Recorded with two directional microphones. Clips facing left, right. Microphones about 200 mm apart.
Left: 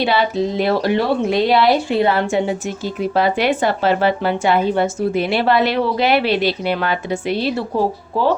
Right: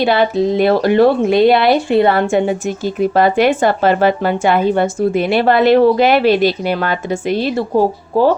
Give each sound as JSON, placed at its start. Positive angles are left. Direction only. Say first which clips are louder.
{"t": 0.0, "sound": "speech", "louder": "right 4 dB", "side_deg": -55}